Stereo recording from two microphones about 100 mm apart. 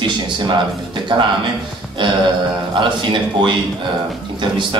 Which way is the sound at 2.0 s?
50° right (ahead or behind).